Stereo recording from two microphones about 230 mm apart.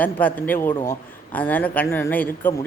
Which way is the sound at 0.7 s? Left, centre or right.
Left.